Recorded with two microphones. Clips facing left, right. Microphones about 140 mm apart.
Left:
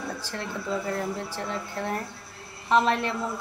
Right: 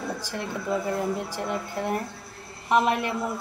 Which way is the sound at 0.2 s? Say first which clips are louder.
Right 2 dB; 15° right (ahead or behind).